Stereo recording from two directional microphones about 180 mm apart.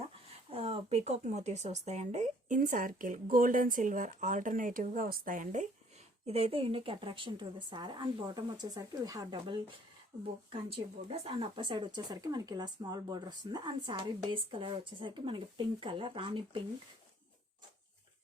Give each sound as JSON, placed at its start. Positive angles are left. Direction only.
{"t": 0.5, "sound": "speech", "side_deg": -35}
{"t": 6.2, "sound": "speech", "side_deg": -35}